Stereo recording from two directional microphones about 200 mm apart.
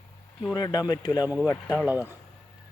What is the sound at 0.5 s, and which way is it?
Speech, 20° left (ahead or behind).